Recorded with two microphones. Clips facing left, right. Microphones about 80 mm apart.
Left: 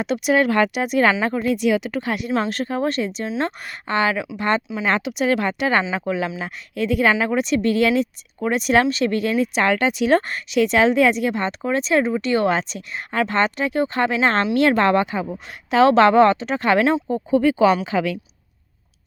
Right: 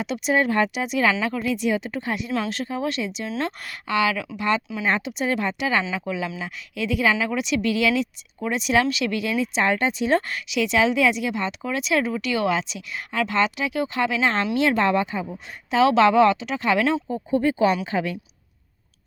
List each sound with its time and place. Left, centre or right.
0.0 s speech: left
0.3 s speech: left
1.2 s speech: left
1.5 s speech: left
4.8 s speech: left
7.3 s speech: left
10.2 s speech: left
15.4 s speech: left
17.3 s a woman's voice: left